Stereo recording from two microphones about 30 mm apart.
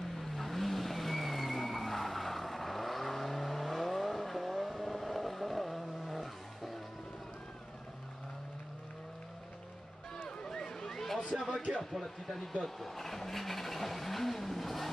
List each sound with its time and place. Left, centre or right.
0.1 s vehicle: centre
10.4 s a sound: left
11.3 s speech: centre